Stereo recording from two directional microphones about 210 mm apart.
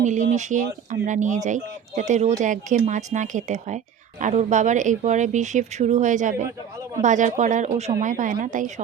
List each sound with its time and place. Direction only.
0.0 s speech: 35° right (ahead or behind)